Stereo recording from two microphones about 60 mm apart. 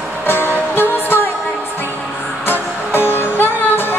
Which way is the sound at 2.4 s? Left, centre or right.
Left.